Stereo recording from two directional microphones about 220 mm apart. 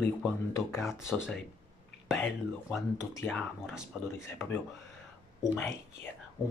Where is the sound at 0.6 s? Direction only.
10° left (ahead or behind).